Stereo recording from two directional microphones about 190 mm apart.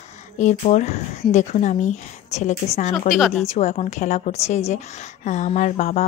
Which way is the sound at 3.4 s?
35° left (ahead or behind).